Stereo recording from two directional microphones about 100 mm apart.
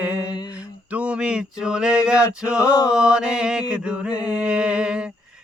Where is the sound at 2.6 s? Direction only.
35° left (ahead or behind).